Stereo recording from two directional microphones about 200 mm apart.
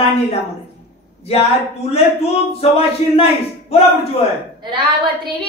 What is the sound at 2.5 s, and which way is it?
Speech, 30° left (ahead or behind).